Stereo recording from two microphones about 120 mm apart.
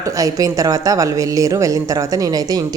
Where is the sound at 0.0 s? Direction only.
30° right (ahead or behind).